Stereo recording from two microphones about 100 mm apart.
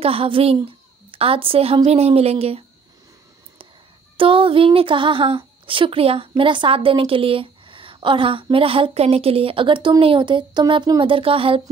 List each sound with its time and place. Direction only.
0.0 s a woman's voice: 70° right (ahead or behind)
1.9 s speech: 90° right
4.2 s speech: 60° right (ahead or behind)